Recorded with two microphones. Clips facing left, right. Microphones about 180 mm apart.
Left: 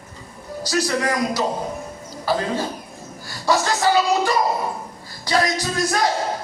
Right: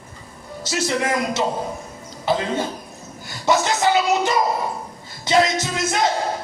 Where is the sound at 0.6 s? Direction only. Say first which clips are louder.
Left 1 dB; 25° right (ahead or behind).